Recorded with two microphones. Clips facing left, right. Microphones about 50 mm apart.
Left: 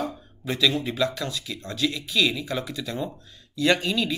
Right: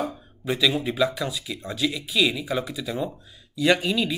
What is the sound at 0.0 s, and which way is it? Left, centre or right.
Speech, centre.